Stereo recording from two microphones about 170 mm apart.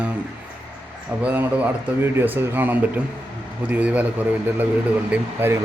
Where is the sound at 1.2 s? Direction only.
10° right (ahead or behind).